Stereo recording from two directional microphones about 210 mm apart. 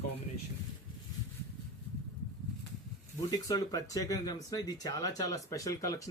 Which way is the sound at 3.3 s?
15° left (ahead or behind).